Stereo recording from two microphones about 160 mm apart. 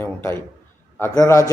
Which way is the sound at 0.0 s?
15° left (ahead or behind).